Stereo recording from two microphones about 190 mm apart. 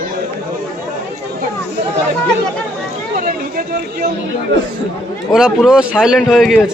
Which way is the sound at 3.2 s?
50° right (ahead or behind).